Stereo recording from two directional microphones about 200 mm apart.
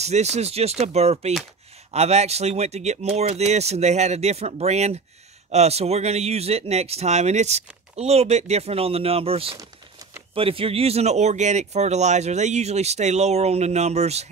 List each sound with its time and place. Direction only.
0.0 s speech: 35° right (ahead or behind)